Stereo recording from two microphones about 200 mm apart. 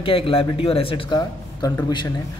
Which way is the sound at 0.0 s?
25° left (ahead or behind).